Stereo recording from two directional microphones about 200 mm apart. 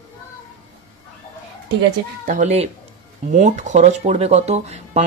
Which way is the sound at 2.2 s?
40° right (ahead or behind).